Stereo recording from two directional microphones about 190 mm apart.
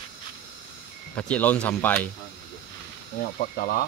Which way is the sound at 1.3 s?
5° left (ahead or behind).